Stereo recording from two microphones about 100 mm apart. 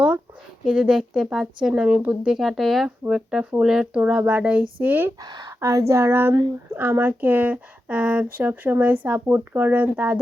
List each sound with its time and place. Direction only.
0.6 s speech: 5° right (ahead or behind)
5.2 s speech: 45° right (ahead or behind)
5.5 s speech: 30° right (ahead or behind); by 10.2 s 15° right (ahead or behind)